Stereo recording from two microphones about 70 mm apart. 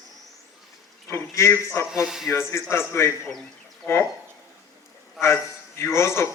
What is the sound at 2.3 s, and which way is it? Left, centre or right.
Speech, left.